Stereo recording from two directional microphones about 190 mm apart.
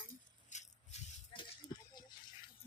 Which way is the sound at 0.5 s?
30° left (ahead or behind).